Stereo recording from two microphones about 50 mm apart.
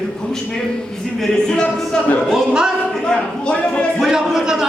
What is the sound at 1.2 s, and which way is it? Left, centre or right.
Speech, centre.